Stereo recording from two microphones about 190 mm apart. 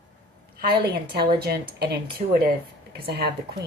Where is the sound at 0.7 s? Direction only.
55° right (ahead or behind).